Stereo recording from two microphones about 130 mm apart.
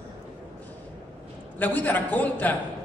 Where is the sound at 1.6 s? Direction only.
15° left (ahead or behind).